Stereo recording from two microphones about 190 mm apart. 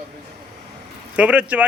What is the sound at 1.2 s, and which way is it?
Speech, 5° right (ahead or behind).